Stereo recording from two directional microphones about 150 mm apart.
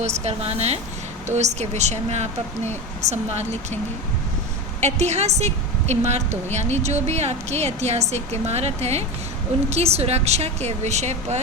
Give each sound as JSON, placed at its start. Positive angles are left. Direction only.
{"t": 0.0, "sound": "a woman's voice", "side_deg": -45}
{"t": 4.8, "sound": "a woman's voice", "side_deg": -50}